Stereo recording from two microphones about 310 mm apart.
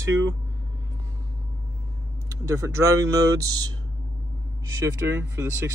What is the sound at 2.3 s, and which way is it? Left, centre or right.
Speech, centre.